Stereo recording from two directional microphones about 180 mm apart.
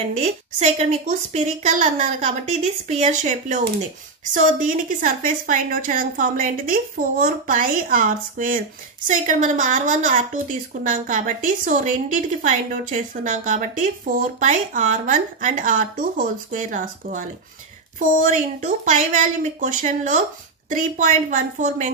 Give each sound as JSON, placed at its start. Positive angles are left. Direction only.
{"t": 0.2, "sound": "a woman's voice", "side_deg": -40}